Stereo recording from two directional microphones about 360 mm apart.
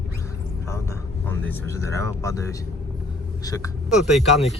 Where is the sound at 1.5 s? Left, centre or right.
Centre.